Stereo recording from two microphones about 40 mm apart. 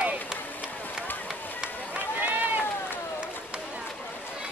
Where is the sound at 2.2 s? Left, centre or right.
Right.